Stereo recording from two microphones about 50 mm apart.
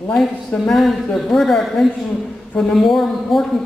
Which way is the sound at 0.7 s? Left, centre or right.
Centre.